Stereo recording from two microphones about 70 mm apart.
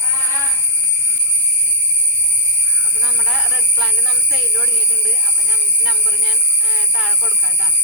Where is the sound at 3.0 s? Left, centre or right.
Centre.